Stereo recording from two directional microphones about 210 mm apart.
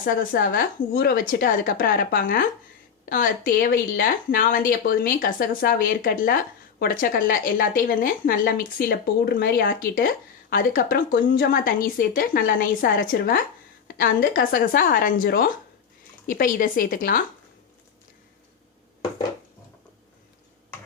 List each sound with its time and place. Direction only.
0.0 s a woman's voice: 45° left (ahead or behind)